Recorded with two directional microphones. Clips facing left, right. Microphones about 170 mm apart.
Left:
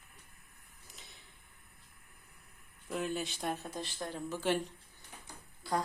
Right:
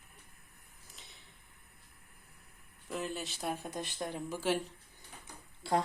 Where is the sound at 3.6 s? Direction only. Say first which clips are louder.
Right 2 dB; 20° right (ahead or behind).